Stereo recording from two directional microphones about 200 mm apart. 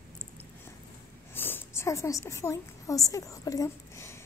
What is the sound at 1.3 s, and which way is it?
A woman's voice, 10° left (ahead or behind).